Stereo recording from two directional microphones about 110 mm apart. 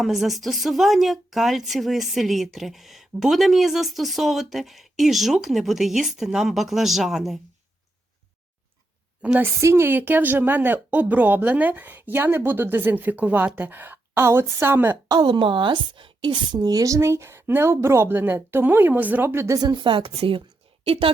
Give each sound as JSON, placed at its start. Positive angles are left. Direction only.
{"t": 0.0, "sound": "speech", "side_deg": 0}
{"t": 9.2, "sound": "a woman's voice", "side_deg": -15}
{"t": 9.6, "sound": "a woman's voice", "side_deg": -25}
{"t": 15.0, "sound": "a woman's voice", "side_deg": -40}
{"t": 19.5, "sound": "a woman's voice", "side_deg": -40}